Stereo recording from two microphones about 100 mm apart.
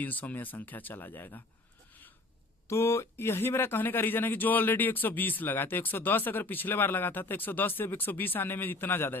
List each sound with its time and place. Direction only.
0.0 s speech: 15° left (ahead or behind)
2.6 s speech: 25° left (ahead or behind)